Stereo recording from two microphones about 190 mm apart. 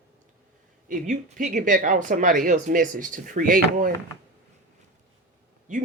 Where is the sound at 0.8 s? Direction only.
45° right (ahead or behind).